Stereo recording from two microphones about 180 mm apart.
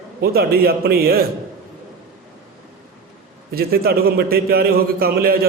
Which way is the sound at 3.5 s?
60° right (ahead or behind).